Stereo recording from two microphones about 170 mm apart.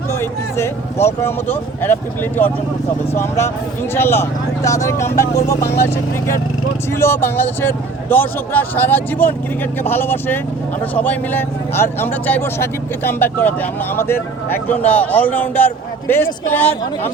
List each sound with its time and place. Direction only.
0.1 s speech: 15° left (ahead or behind)